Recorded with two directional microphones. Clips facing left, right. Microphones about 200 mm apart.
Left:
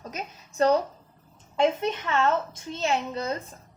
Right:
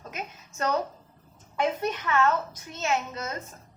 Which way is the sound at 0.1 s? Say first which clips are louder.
Right 1 dB; 35° left (ahead or behind).